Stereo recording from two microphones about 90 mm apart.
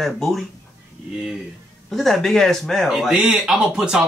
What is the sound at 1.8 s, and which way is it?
Speech, centre (ahead or behind).